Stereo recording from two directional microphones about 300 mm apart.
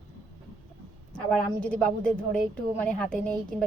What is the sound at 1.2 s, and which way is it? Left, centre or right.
A woman's voice, centre.